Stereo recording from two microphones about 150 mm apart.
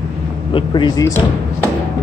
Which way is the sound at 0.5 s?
35° left (ahead or behind).